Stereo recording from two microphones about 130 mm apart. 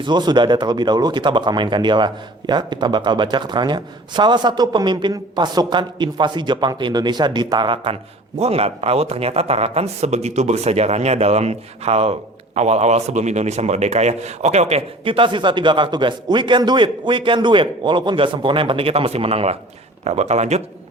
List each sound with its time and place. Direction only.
0.0 s speech: 35° right (ahead or behind)
8.4 s speech: 50° right (ahead or behind)